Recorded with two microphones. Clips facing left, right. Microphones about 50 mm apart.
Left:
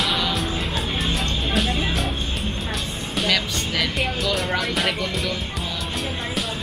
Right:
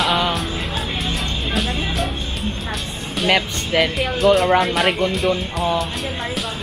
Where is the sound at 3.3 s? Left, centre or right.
Right.